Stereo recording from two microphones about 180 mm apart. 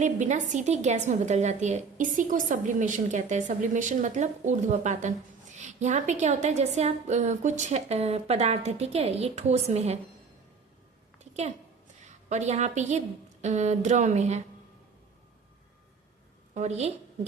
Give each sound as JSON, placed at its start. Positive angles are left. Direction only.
{"t": 0.0, "sound": "a woman's voice", "side_deg": -45}
{"t": 11.2, "sound": "a sound", "side_deg": -40}
{"t": 12.3, "sound": "a woman's voice", "side_deg": -40}
{"t": 16.6, "sound": "a woman's voice", "side_deg": -40}